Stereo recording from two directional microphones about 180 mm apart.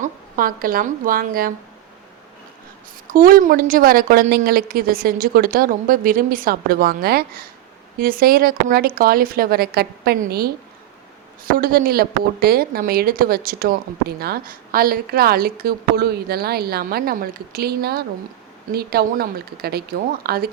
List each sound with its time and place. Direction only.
0.0 s speech: 50° right (ahead or behind)
3.1 s a woman's voice: 50° right (ahead or behind)